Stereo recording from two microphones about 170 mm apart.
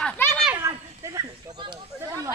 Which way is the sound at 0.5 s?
20° right (ahead or behind).